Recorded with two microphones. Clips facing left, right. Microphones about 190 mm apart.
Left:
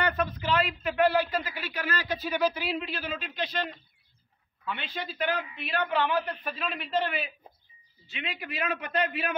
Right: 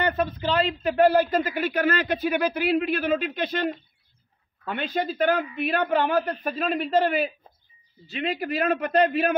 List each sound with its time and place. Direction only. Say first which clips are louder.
0.0 s a man's voice: right 4 dB; 25° right (ahead or behind)